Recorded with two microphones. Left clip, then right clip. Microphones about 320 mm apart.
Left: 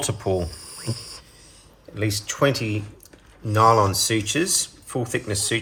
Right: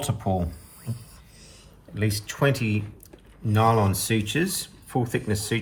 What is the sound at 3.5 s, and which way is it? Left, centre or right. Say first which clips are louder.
Speech: left 5 dB; centre.